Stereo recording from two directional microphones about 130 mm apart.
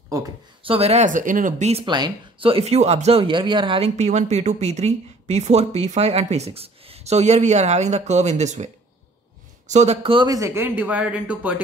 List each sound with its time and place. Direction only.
0.7 s speech: 50° right (ahead or behind); by 1.7 s 90° right
1.9 s speech: 35° right (ahead or behind)
3.9 s speech: 65° right (ahead or behind)
9.7 s speech: 60° right (ahead or behind)
10.1 s speech: 30° right (ahead or behind); by 11.6 s 10° right (ahead or behind)